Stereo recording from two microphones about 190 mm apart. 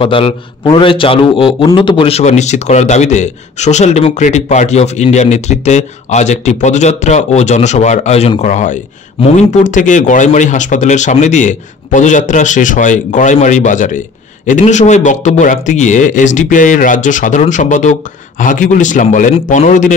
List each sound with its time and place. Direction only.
0.0 s a man's voice: 25° left (ahead or behind)